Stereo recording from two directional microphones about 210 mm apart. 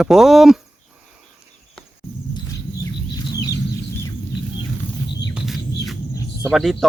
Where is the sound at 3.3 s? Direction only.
15° left (ahead or behind).